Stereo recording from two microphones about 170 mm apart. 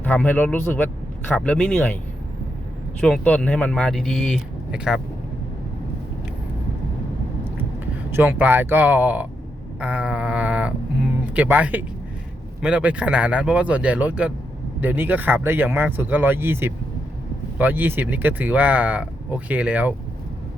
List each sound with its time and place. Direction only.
0.0 s a man's voice: 10° left (ahead or behind)
3.0 s speech: 5° left (ahead or behind)
8.1 s speech: 10° right (ahead or behind)
9.8 s sheep: 5° right (ahead or behind)
12.6 s speech: 10° right (ahead or behind)